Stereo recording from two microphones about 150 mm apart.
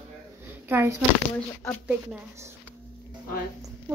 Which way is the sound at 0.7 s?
15° right (ahead or behind).